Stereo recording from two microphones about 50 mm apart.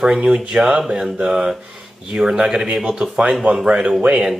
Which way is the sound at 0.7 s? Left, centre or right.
Centre.